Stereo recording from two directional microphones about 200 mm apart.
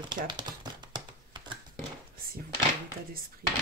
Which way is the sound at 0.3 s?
20° right (ahead or behind).